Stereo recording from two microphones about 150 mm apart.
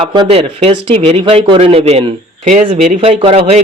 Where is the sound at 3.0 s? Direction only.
40° right (ahead or behind).